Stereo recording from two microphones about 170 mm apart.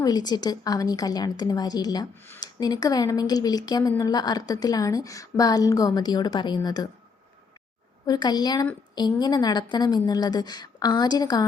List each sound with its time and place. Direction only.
0.0 s speech: 25° left (ahead or behind)
8.0 s speech: 25° left (ahead or behind)